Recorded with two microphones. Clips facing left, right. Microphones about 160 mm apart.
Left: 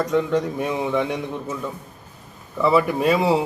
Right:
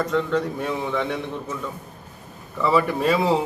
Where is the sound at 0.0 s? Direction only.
15° left (ahead or behind).